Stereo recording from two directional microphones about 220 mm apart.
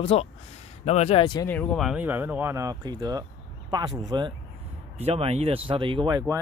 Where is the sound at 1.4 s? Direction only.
5° left (ahead or behind).